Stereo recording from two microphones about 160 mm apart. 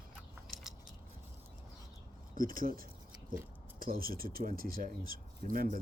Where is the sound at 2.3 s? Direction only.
60° right (ahead or behind).